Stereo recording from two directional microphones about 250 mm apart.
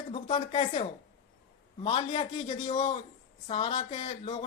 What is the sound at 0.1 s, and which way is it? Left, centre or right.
Speech, left.